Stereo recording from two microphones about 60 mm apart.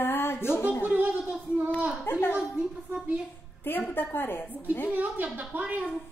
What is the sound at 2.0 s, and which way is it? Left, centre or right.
Speech, left.